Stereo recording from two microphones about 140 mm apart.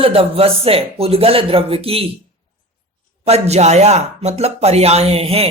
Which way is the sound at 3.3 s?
50° right (ahead or behind).